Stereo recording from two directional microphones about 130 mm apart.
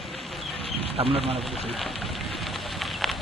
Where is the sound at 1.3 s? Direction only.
Centre (ahead or behind).